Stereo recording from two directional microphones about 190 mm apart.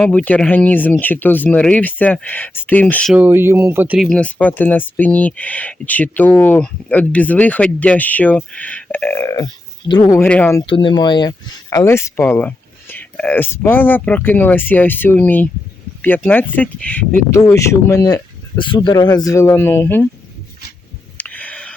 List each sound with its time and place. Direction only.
0.0 s speech: 5° left (ahead or behind)
3.2 s speech: 10° right (ahead or behind); by 10.6 s 10° left (ahead or behind)
10.7 s speech: 25° left (ahead or behind)
21.2 s a sound: 10° left (ahead or behind)